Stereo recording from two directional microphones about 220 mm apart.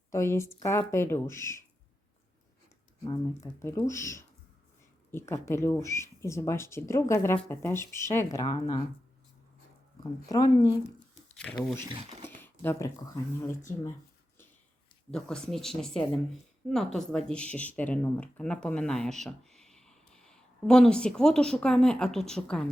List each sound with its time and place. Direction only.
0.1 s speech: 15° left (ahead or behind)
3.1 s speech: 15° left (ahead or behind)
10.0 s speech: 15° left (ahead or behind)
11.6 s speech: 10° left (ahead or behind)
12.2 s a sound: 10° left (ahead or behind)
15.1 s speech: 5° left (ahead or behind)